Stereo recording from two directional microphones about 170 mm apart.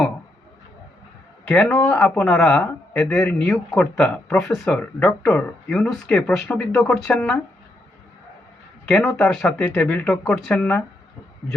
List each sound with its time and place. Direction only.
1.5 s a man's voice: 5° left (ahead or behind)
9.1 s a man's voice: 5° left (ahead or behind)